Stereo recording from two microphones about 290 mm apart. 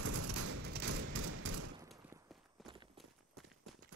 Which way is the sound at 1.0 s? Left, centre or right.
Right.